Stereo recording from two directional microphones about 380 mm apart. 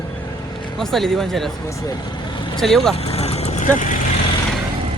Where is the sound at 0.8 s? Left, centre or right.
Centre.